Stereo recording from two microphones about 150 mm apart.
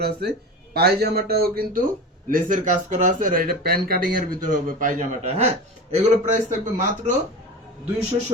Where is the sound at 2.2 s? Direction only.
65° right (ahead or behind).